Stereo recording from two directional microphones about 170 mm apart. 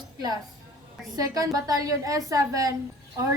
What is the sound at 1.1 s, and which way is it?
A woman's voice, 20° right (ahead or behind).